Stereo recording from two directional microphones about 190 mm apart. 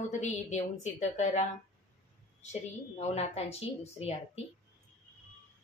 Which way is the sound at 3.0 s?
35° left (ahead or behind).